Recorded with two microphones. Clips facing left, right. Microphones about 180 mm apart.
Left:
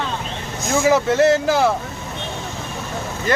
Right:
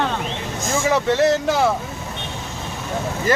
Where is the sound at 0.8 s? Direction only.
5° left (ahead or behind).